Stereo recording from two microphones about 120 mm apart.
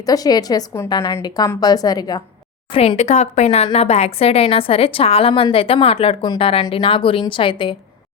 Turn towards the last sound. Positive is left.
turn(degrees=45)  # may be behind; listen again after turning